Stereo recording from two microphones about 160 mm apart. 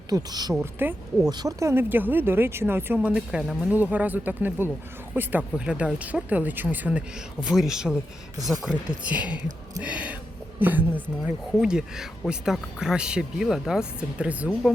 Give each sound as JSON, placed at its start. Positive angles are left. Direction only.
{"t": 0.1, "sound": "speech", "side_deg": -25}
{"t": 0.5, "sound": "speech", "side_deg": -10}
{"t": 1.3, "sound": "speech", "side_deg": -25}